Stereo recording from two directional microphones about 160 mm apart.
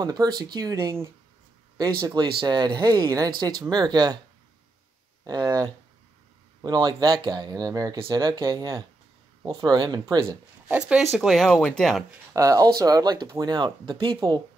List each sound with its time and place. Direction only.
0.0 s speech: 25° right (ahead or behind)
5.2 s speech: 25° right (ahead or behind)
10.7 s speech: 5° right (ahead or behind)
12.4 s speech: 20° right (ahead or behind)